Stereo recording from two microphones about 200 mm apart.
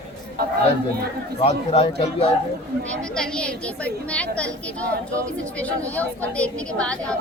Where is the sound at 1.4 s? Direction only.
30° left (ahead or behind).